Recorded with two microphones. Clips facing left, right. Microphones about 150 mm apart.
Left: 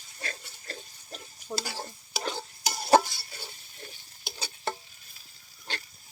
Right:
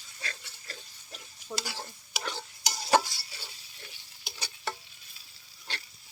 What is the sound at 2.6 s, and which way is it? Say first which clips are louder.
Stir: left 4 dB; 55° left (ahead or behind).